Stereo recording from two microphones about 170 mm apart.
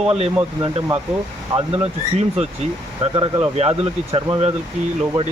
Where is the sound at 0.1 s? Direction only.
30° right (ahead or behind).